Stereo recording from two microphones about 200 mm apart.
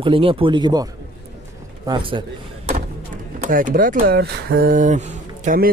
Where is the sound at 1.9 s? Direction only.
25° right (ahead or behind).